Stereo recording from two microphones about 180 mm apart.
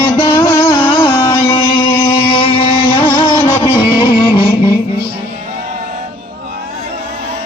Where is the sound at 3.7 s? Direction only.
25° left (ahead or behind).